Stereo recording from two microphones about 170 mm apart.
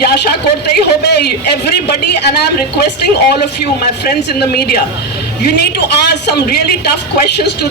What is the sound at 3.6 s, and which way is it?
A man's voice, 70° left (ahead or behind).